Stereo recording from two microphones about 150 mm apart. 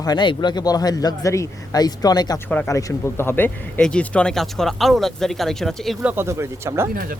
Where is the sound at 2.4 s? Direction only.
10° left (ahead or behind).